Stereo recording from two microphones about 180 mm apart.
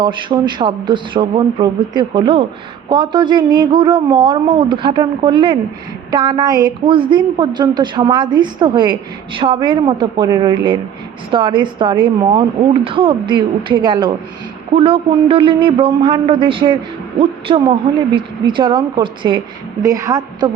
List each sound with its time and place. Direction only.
0.0 s a woman's voice: 25° right (ahead or behind)